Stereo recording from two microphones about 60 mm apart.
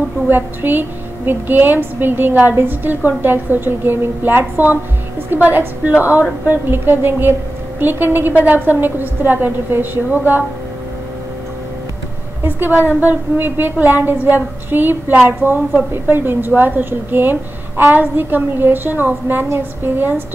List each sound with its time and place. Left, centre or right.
0.3 s a woman's voice: right
12.4 s a woman's voice: right